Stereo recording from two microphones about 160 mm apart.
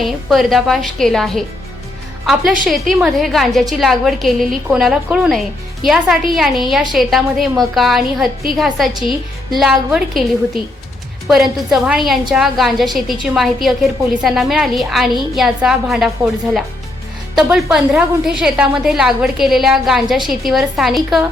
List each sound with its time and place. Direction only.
0.0 s a woman's voice: centre (ahead or behind)
3.0 s a woman's voice: centre (ahead or behind)